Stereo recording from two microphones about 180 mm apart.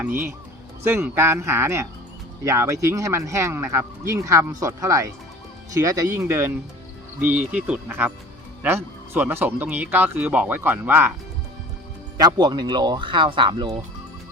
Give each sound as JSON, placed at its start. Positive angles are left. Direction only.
{"t": 0.9, "sound": "speech", "side_deg": -15}
{"t": 12.1, "sound": "speech", "side_deg": -20}